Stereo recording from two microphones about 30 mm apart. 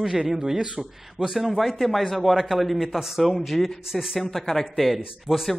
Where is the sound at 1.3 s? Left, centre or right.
Centre.